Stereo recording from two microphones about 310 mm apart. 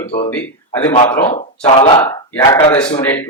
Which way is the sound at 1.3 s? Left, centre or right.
Centre.